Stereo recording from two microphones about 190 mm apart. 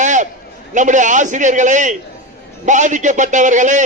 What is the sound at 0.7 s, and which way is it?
A man's voice, 40° right (ahead or behind).